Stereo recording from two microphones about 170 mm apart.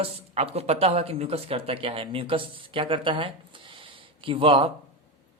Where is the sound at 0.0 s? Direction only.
35° right (ahead or behind).